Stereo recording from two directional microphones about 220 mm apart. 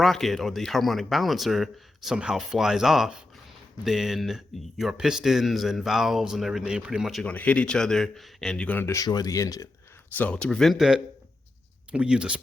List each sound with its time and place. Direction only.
0.0 s speech: centre (ahead or behind)